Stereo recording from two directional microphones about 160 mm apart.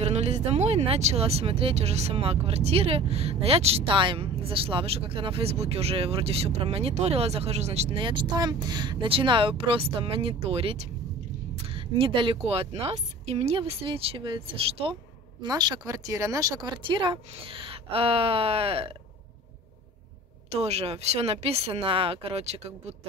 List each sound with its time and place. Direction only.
0.0 s speech: 45° right (ahead or behind)
11.6 s a sound: 35° right (ahead or behind)
12.4 s speech: 40° right (ahead or behind)
15.4 s speech: 25° right (ahead or behind)
20.5 s speech: 40° right (ahead or behind)